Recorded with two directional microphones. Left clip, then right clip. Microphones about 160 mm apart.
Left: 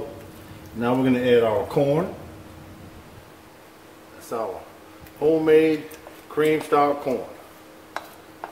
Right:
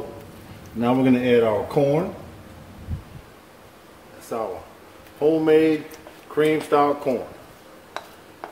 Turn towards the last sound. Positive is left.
turn(degrees=-35)  # may be behind; listen again after turning